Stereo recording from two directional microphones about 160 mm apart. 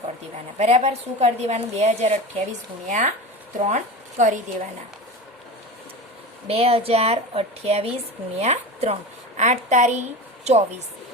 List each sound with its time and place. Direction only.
0.6 s a woman's voice: 45° right (ahead or behind)
6.5 s a woman's voice: 40° right (ahead or behind)